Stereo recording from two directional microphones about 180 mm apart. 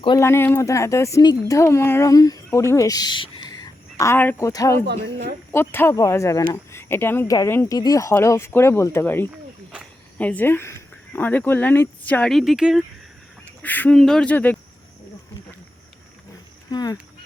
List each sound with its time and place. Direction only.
0.2 s speech: 15° left (ahead or behind); by 12.8 s centre (ahead or behind)
13.6 s speech: 10° left (ahead or behind)
16.6 s speech: 20° left (ahead or behind)